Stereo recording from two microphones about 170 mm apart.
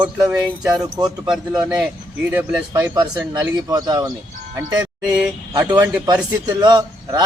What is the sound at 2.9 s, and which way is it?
Speech, 25° right (ahead or behind).